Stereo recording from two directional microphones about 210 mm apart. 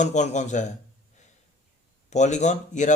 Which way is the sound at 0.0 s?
35° left (ahead or behind).